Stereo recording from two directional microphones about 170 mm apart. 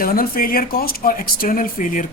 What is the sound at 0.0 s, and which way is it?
Speech, 60° left (ahead or behind).